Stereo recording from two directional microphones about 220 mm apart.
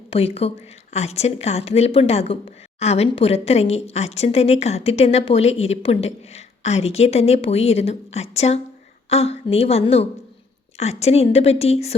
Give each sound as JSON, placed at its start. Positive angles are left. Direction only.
{"t": 0.1, "sound": "speech", "side_deg": 25}